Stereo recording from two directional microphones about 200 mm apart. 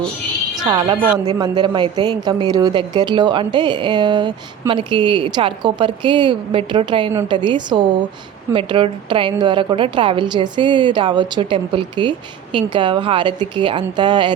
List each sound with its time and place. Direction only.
0.6 s speech: 20° right (ahead or behind)